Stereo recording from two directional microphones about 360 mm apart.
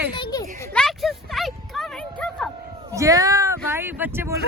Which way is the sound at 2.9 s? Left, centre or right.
Centre.